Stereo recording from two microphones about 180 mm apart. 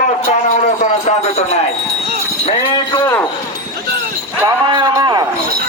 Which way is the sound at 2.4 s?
25° left (ahead or behind).